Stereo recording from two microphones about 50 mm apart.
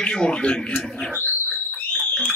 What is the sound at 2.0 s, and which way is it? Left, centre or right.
Frog, centre.